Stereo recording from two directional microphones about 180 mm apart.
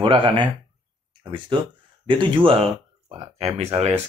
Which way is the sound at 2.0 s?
25° right (ahead or behind).